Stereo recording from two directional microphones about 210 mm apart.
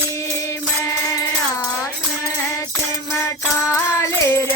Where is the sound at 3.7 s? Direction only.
15° left (ahead or behind).